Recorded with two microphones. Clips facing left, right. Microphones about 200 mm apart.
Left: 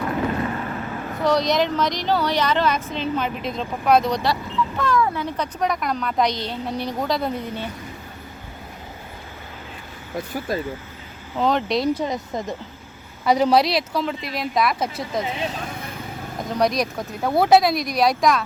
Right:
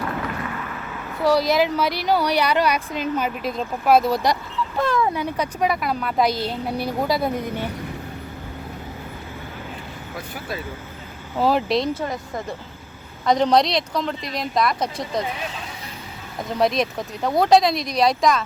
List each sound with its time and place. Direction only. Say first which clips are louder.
1.2 s speech: right 1 dB; 5° right (ahead or behind)
4.8 s speech: right 1 dB; 25° right (ahead or behind)
11.3 s speech: right 1 dB; 5° right (ahead or behind)
11.9 s speech: left 2 dB; 20° left (ahead or behind)
13.2 s speech: even; 5° left (ahead or behind)
16.5 s speech: right 1 dB; centre (ahead or behind)